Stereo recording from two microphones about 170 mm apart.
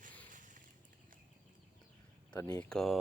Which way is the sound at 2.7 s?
Centre (ahead or behind).